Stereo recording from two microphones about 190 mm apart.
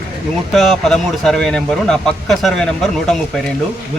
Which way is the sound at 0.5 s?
Centre (ahead or behind).